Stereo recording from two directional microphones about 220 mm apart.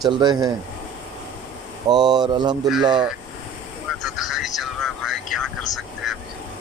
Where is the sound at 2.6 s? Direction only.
5° right (ahead or behind).